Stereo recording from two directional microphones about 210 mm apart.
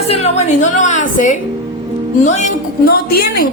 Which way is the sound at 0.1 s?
30° left (ahead or behind).